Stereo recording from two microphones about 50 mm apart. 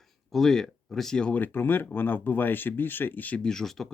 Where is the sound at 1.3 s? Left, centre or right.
Left.